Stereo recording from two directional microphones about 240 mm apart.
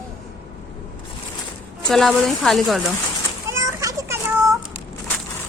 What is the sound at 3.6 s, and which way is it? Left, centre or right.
Children playing, centre.